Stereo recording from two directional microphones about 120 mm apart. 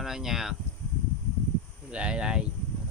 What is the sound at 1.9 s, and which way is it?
Speech, 10° right (ahead or behind).